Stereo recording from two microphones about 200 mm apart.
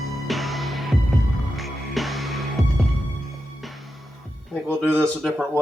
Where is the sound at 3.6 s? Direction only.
Centre (ahead or behind).